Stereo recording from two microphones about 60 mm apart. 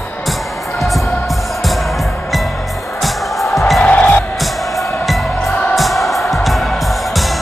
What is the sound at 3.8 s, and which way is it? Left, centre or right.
Music, left.